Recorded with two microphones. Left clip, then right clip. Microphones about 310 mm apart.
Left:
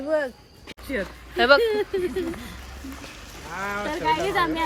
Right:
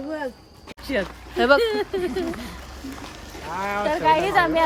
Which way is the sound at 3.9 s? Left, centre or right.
Centre.